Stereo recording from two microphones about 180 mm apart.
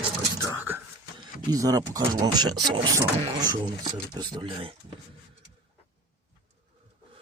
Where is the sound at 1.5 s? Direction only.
20° right (ahead or behind).